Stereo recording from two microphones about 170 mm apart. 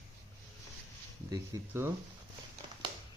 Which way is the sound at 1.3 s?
15° right (ahead or behind).